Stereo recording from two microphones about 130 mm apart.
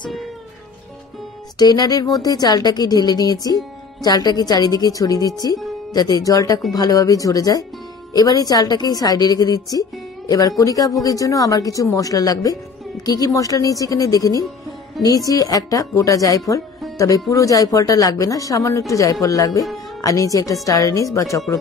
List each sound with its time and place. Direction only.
1.6 s a woman's voice: 30° left (ahead or behind)